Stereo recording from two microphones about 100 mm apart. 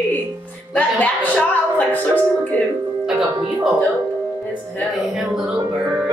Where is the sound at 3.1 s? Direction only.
5° right (ahead or behind).